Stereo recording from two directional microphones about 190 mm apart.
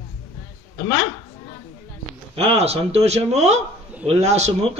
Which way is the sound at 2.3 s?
30° right (ahead or behind).